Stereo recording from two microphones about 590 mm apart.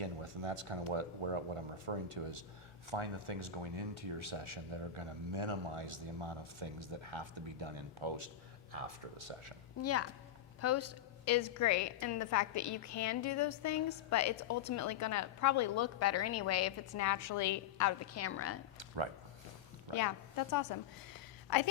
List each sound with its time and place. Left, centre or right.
0.0 s speech: right
8.7 s speech: right
9.8 s a woman's voice: left
19.9 s a woman's voice: left